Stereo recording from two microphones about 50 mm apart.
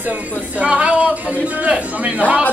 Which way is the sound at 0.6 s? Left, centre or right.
Right.